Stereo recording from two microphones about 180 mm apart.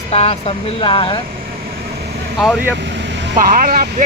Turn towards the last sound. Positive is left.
turn(degrees=-50)  # may be behind; listen again after turning